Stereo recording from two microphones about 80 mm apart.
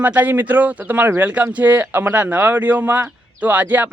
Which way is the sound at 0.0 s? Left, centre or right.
Centre.